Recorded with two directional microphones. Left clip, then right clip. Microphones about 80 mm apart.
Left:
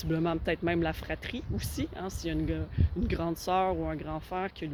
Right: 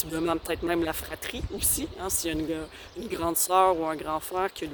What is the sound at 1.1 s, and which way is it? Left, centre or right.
Speech, right.